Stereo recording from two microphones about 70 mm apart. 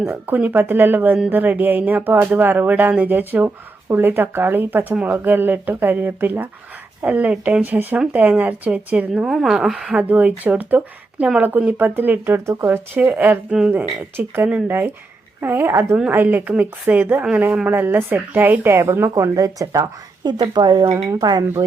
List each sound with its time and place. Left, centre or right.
0.3 s speech: right
9.2 s speech: centre; by 12.4 s right
12.5 s speech: right
20.2 s speech: right
20.9 s speech: right